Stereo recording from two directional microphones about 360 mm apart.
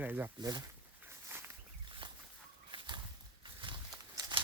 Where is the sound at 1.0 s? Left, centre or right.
Centre.